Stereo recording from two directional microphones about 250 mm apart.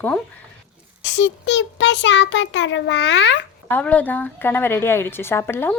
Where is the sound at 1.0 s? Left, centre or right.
Left.